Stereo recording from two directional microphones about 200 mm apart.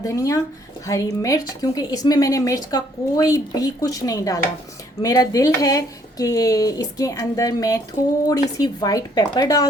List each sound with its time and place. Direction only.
0.0 s a woman's voice: 15° left (ahead or behind)